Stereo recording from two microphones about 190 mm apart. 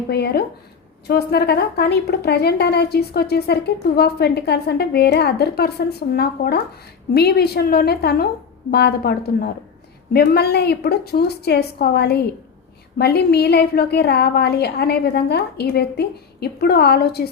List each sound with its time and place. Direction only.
0.1 s a woman's voice: 60° left (ahead or behind)